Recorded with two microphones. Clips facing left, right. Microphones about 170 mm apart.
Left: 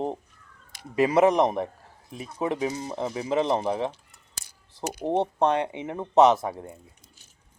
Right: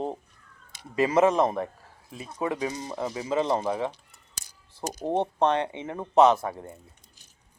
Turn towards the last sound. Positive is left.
turn(degrees=15)  # may be behind; listen again after turning